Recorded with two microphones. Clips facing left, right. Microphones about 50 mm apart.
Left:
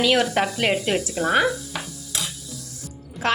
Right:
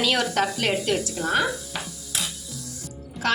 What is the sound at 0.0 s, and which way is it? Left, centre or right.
Speech, centre.